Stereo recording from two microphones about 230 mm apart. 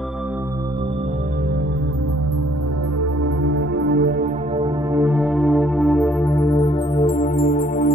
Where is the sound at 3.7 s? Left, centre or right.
Right.